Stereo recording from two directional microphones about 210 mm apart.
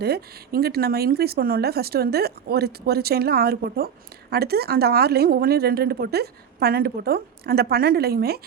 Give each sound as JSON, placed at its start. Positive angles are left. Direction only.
{"t": 0.0, "sound": "speech", "side_deg": -50}